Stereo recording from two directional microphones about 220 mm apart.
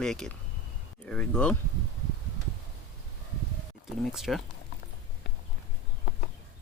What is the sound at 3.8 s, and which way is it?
Speech, centre (ahead or behind).